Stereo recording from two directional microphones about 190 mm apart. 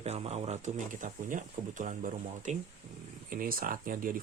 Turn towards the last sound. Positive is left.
turn(degrees=-45)  # may be behind; listen again after turning